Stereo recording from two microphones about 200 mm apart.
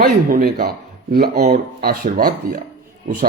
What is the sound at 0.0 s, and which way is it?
Speech, 45° right (ahead or behind).